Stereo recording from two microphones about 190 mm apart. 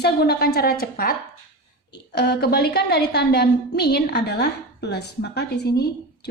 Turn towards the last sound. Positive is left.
turn(degrees=60)  # may be behind; listen again after turning